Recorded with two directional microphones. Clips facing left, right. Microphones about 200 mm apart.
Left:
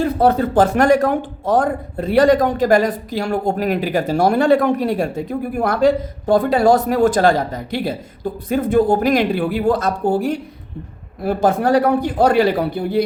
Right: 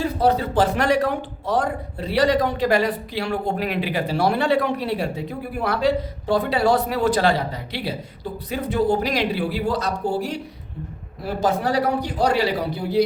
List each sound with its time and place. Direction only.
0.0 s a man's voice: 50° left (ahead or behind)